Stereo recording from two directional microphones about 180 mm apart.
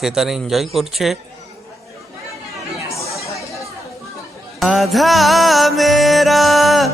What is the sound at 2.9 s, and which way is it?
Chatter, 15° left (ahead or behind).